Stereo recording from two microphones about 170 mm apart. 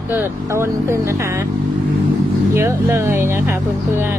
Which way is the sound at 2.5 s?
15° right (ahead or behind).